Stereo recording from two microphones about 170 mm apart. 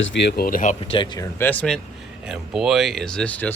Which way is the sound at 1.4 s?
10° left (ahead or behind).